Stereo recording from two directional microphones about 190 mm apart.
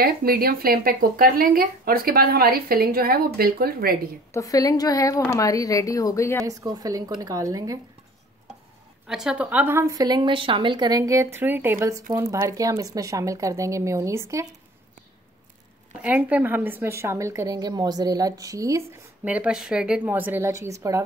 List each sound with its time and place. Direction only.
0.0 s speech: 50° right (ahead or behind)
4.3 s a woman's voice: 20° left (ahead or behind)
6.4 s a woman's voice: 20° right (ahead or behind)
9.0 s a woman's voice: 5° right (ahead or behind)
16.0 s a woman's voice: 10° right (ahead or behind)